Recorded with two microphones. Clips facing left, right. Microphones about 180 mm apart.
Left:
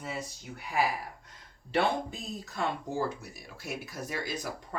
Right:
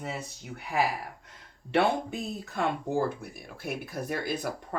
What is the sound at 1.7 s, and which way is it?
Speech, 60° right (ahead or behind).